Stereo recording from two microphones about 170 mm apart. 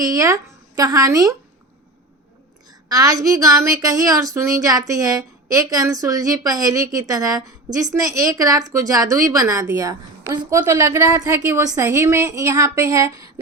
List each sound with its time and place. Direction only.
0.0 s a woman's voice: 20° right (ahead or behind)
2.6 s a woman's voice: 20° right (ahead or behind)